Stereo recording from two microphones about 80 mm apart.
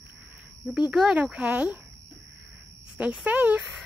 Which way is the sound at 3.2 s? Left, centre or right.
Centre.